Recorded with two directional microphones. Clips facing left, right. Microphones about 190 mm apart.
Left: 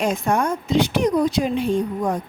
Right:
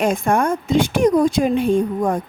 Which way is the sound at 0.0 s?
50° right (ahead or behind).